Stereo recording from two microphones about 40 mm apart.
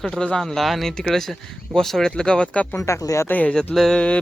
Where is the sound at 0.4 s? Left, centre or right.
Centre.